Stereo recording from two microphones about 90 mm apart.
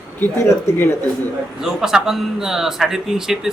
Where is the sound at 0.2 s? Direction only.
25° left (ahead or behind).